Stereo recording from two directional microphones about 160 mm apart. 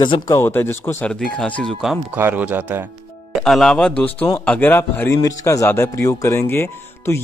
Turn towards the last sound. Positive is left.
turn(degrees=15)  # may be behind; listen again after turning